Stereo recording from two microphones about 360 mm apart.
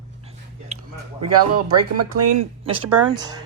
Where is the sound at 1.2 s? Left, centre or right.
Right.